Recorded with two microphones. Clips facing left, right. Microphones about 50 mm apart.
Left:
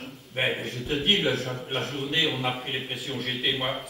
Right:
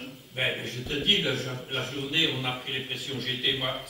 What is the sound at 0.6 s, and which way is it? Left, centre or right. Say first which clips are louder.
A man's voice: left 3 dB; left.